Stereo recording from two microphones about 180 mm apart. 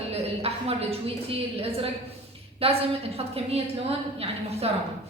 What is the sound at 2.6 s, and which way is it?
A woman's voice, 35° right (ahead or behind).